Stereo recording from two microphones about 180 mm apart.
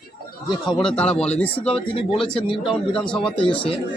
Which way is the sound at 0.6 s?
5° left (ahead or behind).